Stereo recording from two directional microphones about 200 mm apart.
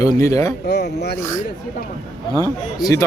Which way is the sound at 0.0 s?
15° left (ahead or behind).